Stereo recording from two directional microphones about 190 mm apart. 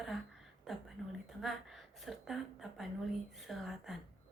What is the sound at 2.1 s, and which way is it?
A woman's voice, centre (ahead or behind).